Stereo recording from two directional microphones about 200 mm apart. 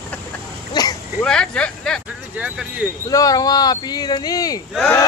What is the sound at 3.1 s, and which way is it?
Speech, 15° left (ahead or behind).